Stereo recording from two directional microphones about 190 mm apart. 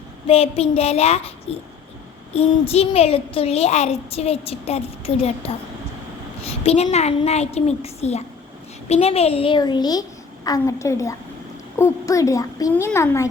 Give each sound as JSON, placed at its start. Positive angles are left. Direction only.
{"t": 0.3, "sound": "a child's voice", "side_deg": 30}
{"t": 2.3, "sound": "a child's voice", "side_deg": 30}